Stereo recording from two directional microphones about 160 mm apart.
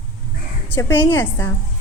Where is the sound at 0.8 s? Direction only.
15° left (ahead or behind).